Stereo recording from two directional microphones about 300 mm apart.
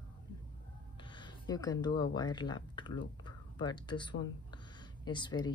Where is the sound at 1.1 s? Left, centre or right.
Centre.